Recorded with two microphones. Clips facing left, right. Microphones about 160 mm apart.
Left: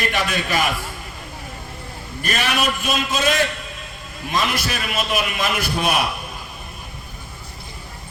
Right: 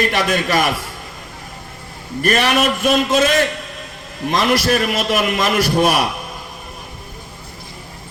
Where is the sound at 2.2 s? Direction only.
55° right (ahead or behind).